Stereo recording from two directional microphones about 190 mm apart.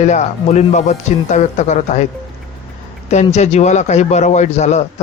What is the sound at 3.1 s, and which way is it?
Speech, 35° left (ahead or behind).